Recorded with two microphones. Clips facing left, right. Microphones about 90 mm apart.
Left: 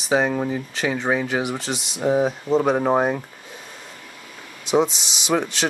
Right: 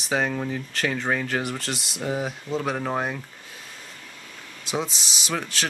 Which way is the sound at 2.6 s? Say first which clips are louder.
Left 7 dB; 20° left (ahead or behind).